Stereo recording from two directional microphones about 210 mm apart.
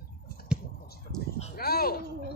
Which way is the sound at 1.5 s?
45° left (ahead or behind).